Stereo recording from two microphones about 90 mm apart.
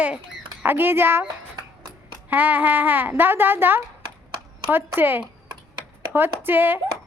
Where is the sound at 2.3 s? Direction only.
20° right (ahead or behind).